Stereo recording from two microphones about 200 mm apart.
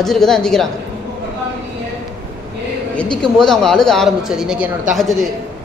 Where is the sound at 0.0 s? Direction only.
Centre (ahead or behind).